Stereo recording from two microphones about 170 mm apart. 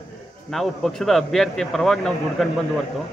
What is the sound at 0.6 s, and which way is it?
A man's voice, centre (ahead or behind).